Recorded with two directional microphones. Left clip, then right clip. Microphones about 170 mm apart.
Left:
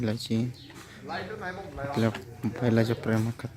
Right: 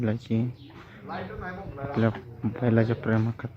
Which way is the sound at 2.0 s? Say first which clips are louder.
Right 3 dB; 15° left (ahead or behind).